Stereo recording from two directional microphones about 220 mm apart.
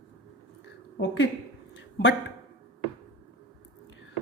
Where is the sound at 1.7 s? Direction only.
55° left (ahead or behind).